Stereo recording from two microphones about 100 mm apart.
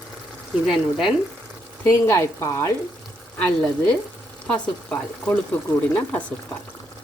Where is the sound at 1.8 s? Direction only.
25° left (ahead or behind).